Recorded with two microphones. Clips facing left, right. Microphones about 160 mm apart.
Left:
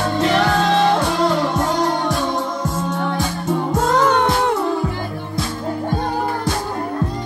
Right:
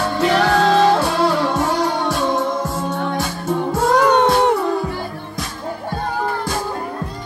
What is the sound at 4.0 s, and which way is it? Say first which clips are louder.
Music: right 4 dB; 20° right (ahead or behind).